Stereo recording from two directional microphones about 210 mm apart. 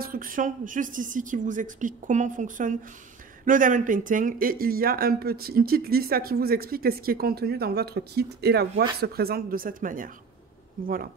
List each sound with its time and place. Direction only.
0.0 s speech: 40° right (ahead or behind)